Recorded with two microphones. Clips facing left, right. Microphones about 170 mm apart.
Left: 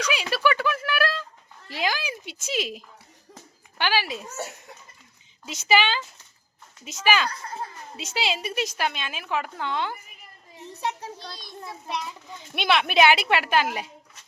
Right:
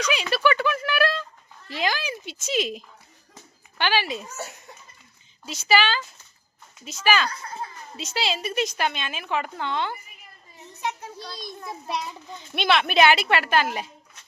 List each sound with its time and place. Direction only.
0.0 s a sound: 10° left (ahead or behind)
1.7 s a woman's voice: 10° left (ahead or behind)
5.5 s a woman's voice: 20° left (ahead or behind)
10.7 s a child's voice: 30° left (ahead or behind)
12.5 s a woman's voice: 10° left (ahead or behind)